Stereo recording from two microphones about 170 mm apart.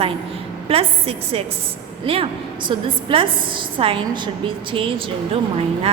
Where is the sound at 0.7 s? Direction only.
35° right (ahead or behind).